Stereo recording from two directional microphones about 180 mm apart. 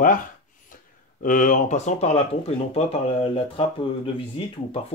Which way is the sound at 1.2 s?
50° left (ahead or behind).